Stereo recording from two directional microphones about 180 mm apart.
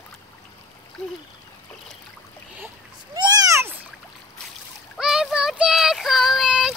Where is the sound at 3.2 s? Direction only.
20° right (ahead or behind).